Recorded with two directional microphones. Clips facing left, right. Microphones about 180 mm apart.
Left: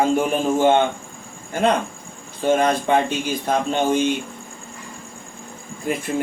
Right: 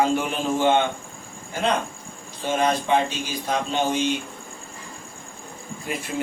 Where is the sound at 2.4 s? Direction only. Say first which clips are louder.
Left 4 dB; 55° left (ahead or behind).